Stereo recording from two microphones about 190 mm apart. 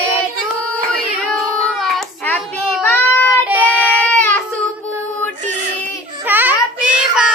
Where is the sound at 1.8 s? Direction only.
5° left (ahead or behind).